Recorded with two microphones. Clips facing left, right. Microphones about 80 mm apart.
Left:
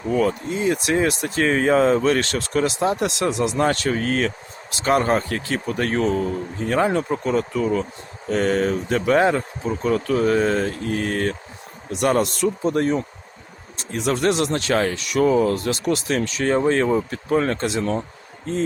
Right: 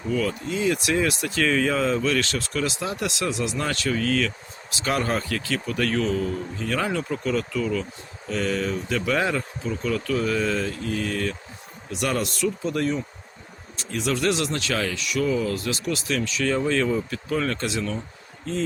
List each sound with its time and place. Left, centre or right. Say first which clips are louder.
0.1 s speech: left 5 dB; left